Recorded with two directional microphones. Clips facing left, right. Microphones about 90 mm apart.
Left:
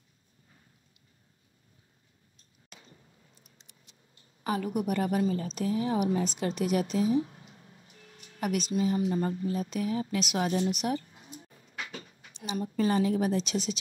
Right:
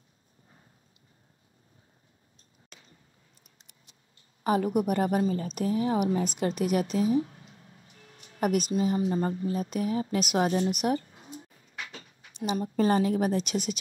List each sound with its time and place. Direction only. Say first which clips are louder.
4.4 s a woman's voice: right 5 dB; 35° right (ahead or behind)
6.5 s a woman's voice: even; 50° right (ahead or behind)
7.2 s a sound: even; 30° left (ahead or behind)
7.9 s music: even; 35° right (ahead or behind)
8.7 s a woman's voice: right 1 dB; 35° right (ahead or behind)
10.7 s a sound: right 3 dB; 45° right (ahead or behind)
12.5 s a woman's voice: right 2 dB; 45° right (ahead or behind)